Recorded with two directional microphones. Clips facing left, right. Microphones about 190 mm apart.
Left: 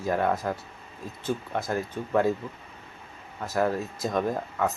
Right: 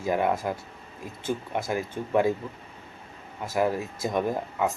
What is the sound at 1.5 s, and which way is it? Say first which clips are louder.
Speech: even; 10° right (ahead or behind).